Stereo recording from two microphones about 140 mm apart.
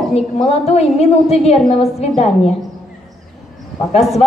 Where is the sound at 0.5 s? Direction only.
50° left (ahead or behind).